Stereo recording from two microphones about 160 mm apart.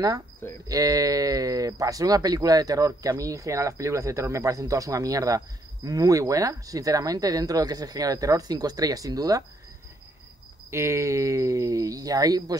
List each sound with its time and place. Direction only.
0.7 s speech: 20° right (ahead or behind)
10.7 s speech: 15° right (ahead or behind)